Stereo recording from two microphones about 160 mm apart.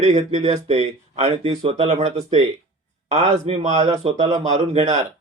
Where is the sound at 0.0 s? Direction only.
45° right (ahead or behind).